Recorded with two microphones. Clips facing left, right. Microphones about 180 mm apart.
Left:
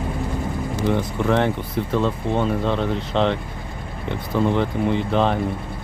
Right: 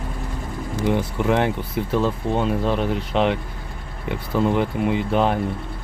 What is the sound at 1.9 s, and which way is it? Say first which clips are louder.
Speech: even; 5° right (ahead or behind).